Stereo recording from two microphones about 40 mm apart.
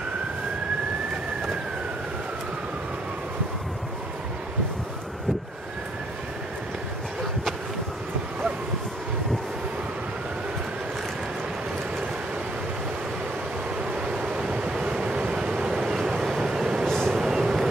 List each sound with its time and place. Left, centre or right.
14.9 s vehicle: right
15.9 s vehicle: centre
16.8 s vehicle: centre
17.2 s vehicle: centre